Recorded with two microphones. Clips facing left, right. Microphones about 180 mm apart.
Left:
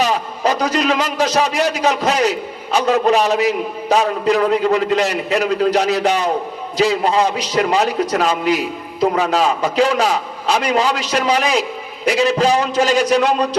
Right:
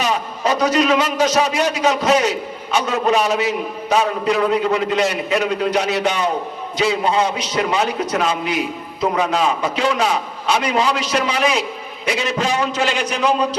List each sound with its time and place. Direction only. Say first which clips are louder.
0.0 s a man's voice: left 3 dB; 35° left (ahead or behind)